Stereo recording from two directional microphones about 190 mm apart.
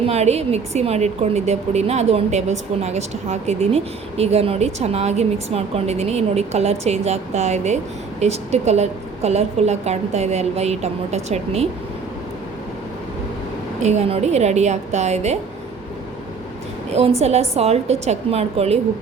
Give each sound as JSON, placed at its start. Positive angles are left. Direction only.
{"t": 0.0, "sound": "a woman's voice", "side_deg": -35}
{"t": 13.8, "sound": "a woman's voice", "side_deg": -35}
{"t": 17.2, "sound": "a woman's voice", "side_deg": -35}